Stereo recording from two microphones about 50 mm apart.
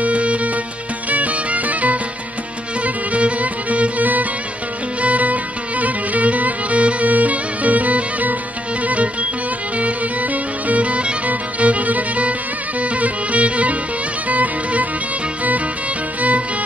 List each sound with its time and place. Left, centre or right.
0.0 s music: right
16.2 s music: right